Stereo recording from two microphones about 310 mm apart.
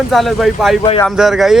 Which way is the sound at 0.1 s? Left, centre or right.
Centre.